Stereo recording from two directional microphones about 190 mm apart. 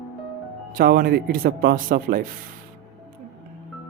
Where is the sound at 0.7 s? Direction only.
50° right (ahead or behind).